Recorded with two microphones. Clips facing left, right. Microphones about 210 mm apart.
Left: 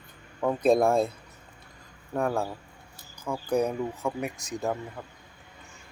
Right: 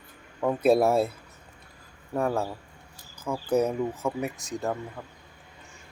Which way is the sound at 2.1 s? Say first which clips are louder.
Right 1 dB; 5° right (ahead or behind).